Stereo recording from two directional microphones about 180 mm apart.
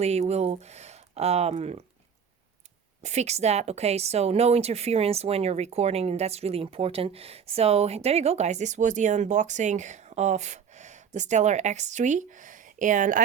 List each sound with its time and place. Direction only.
0.0 s speech: 35° right (ahead or behind)
3.0 s speech: 40° right (ahead or behind)